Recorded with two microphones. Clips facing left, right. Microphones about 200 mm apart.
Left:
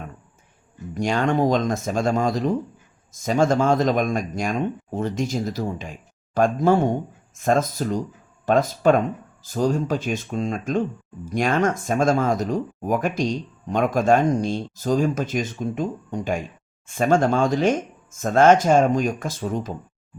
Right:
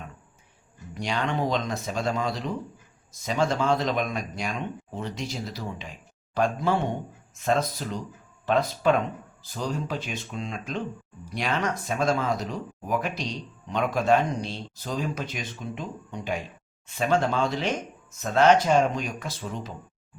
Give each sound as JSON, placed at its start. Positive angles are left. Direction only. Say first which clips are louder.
{"t": 0.9, "sound": "speech", "louder": "left 7 dB", "side_deg": 45}